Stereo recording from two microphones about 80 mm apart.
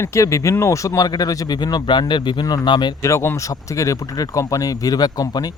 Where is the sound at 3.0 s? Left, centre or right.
Left.